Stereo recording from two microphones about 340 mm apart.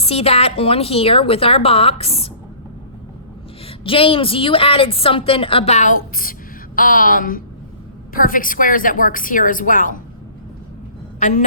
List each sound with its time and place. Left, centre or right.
0.0 s a woman's voice: centre
3.7 s a woman's voice: centre
11.2 s speech: left